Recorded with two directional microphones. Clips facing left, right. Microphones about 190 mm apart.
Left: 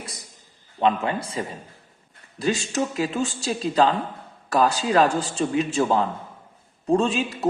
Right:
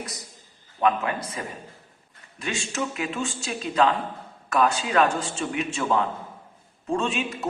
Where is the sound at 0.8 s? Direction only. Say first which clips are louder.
Left 2 dB; 25° left (ahead or behind).